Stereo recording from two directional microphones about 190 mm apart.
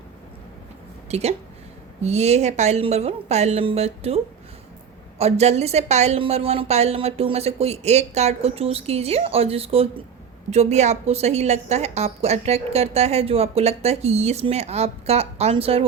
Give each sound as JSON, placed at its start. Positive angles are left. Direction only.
{"t": 1.1, "sound": "a woman's voice", "side_deg": -35}